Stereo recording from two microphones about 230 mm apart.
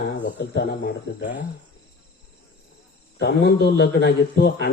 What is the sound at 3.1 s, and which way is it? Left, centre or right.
Speech, left.